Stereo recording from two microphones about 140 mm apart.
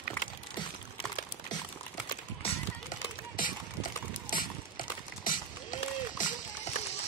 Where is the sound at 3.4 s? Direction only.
85° left.